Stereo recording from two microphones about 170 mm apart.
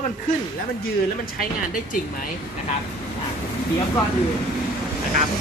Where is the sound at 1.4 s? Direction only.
55° left (ahead or behind).